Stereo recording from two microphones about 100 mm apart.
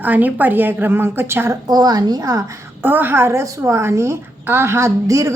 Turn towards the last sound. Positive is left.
turn(degrees=-30)  # may be behind; listen again after turning